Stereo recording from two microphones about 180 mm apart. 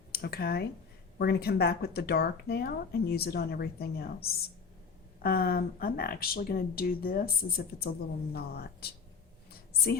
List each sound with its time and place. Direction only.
0.1 s speech: 60° left (ahead or behind)